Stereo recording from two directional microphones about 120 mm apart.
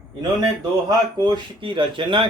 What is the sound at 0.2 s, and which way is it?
Speech, 35° right (ahead or behind).